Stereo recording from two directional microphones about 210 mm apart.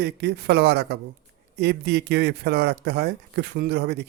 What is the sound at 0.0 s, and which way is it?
Speech, 50° right (ahead or behind).